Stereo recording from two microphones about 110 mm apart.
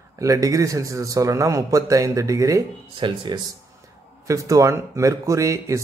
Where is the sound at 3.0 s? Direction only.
40° right (ahead or behind).